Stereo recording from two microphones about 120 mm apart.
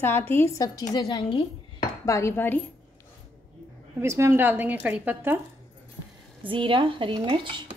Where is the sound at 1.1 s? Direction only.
45° left (ahead or behind).